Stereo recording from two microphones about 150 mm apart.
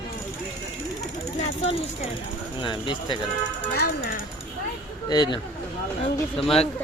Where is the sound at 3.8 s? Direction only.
90° left.